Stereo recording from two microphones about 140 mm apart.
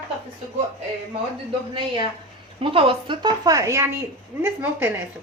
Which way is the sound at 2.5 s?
40° right (ahead or behind).